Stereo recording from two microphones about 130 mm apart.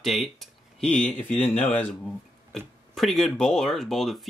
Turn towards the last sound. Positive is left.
turn(degrees=0)  # may be behind; listen again after turning